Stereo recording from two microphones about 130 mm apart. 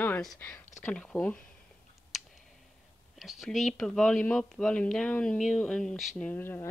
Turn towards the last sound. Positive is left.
turn(degrees=15)  # may be behind; listen again after turning